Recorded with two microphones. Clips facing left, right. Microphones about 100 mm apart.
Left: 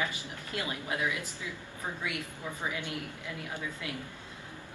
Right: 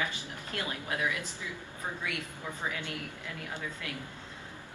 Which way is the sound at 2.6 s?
15° left (ahead or behind).